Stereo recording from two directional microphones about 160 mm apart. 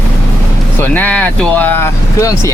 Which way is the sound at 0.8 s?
10° left (ahead or behind).